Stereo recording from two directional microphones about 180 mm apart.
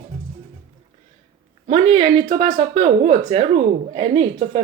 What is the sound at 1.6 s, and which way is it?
Speech, 35° right (ahead or behind).